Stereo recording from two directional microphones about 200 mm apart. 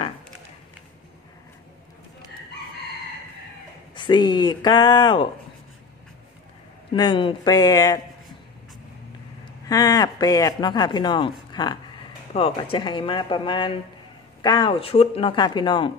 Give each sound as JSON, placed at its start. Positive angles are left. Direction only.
{"t": 3.9, "sound": "speech", "side_deg": 25}
{"t": 6.9, "sound": "speech", "side_deg": 25}
{"t": 9.4, "sound": "speech", "side_deg": 20}